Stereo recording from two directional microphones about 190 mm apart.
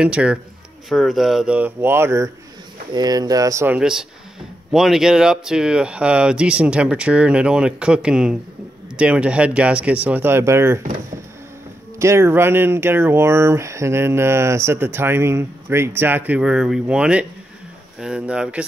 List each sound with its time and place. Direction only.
0.0 s speech: 5° right (ahead or behind)
12.0 s speech: 15° right (ahead or behind)